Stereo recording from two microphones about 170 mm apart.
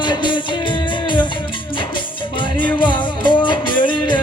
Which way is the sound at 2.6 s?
30° left (ahead or behind).